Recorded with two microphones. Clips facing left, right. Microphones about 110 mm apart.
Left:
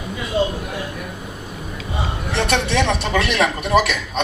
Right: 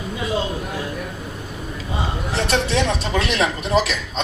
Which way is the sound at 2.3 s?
60° left (ahead or behind).